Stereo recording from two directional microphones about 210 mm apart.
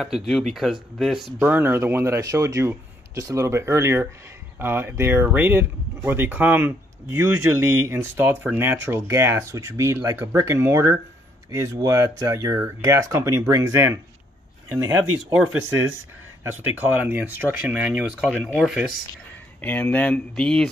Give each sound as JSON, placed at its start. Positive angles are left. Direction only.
{"t": 0.0, "sound": "speech", "side_deg": 0}
{"t": 16.4, "sound": "speech", "side_deg": -10}
{"t": 19.6, "sound": "speech", "side_deg": 10}